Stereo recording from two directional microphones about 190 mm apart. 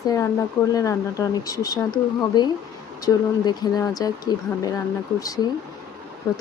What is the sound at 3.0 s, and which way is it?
Speech, 20° left (ahead or behind).